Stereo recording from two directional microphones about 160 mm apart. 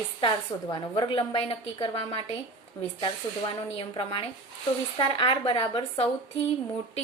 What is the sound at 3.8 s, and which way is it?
A woman's voice, 35° left (ahead or behind).